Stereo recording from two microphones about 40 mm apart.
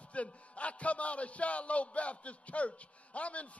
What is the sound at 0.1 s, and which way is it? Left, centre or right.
Speech, left.